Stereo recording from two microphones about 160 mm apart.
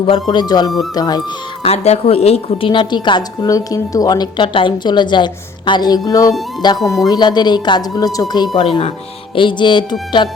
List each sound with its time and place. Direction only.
0.0 s a woman's voice: 30° left (ahead or behind)
1.6 s a woman's voice: 40° left (ahead or behind); by 8.6 s 25° left (ahead or behind)
8.6 s a woman's voice: 35° left (ahead or behind)